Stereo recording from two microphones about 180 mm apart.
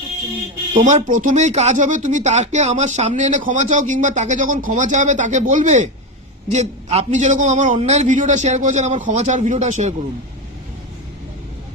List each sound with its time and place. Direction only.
0.7 s speech: 40° right (ahead or behind)